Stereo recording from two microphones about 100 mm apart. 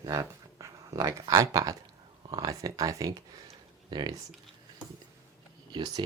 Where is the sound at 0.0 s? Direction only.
35° right (ahead or behind).